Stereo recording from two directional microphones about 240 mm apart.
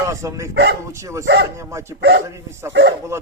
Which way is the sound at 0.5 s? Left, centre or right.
Right.